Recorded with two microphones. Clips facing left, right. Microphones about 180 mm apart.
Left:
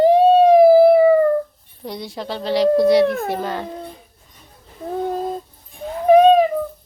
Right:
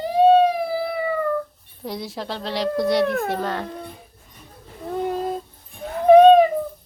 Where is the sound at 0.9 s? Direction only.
50° left (ahead or behind).